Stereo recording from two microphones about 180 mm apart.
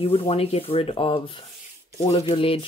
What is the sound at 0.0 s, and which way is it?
Speech, 30° left (ahead or behind).